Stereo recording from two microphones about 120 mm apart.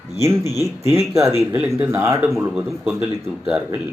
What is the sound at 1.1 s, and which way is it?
Speech, 25° right (ahead or behind).